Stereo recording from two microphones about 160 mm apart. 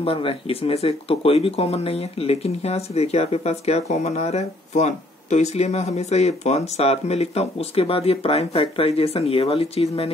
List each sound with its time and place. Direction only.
0.0 s speech: 35° left (ahead or behind)